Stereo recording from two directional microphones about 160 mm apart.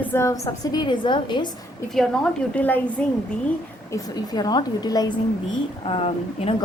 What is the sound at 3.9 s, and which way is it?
A woman's voice, 25° left (ahead or behind).